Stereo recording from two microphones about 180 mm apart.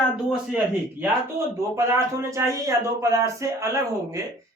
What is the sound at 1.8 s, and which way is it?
A man's voice, 15° right (ahead or behind).